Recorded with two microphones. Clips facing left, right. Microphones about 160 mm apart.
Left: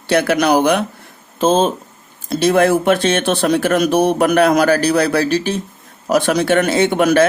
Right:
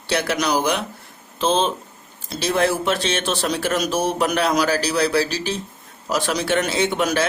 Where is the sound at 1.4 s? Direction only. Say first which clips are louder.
Left 6 dB; 45° left (ahead or behind).